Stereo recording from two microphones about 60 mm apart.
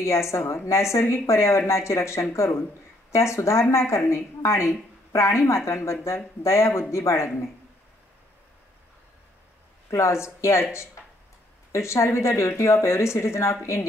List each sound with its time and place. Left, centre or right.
0.0 s a woman's voice: left
9.8 s speech: left
11.7 s speech: left